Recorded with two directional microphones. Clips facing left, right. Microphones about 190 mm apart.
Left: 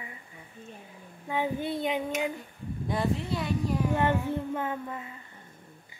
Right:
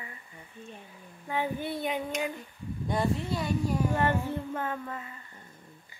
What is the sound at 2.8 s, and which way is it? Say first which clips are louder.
Speech: even; centre (ahead or behind).